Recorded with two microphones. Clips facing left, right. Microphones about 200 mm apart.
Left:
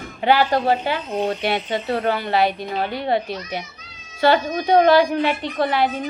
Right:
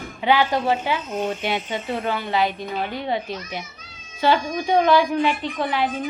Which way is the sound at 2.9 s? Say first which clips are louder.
Left 5 dB; 65° left (ahead or behind).